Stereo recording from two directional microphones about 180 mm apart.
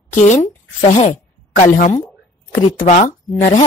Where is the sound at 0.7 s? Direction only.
40° left (ahead or behind).